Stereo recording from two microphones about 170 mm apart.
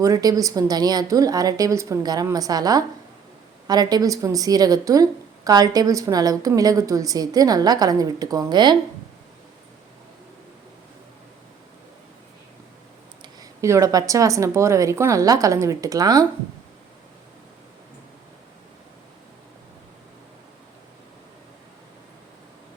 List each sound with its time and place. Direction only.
0.0 s a woman's voice: 20° right (ahead or behind)
13.2 s a woman's voice: 20° right (ahead or behind)